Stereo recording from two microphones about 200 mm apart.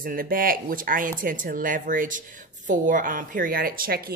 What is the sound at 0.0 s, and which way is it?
Speech, 45° right (ahead or behind).